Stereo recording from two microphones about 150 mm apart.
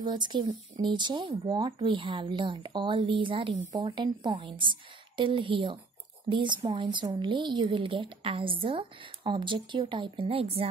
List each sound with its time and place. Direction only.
0.0 s a woman's voice: 30° right (ahead or behind)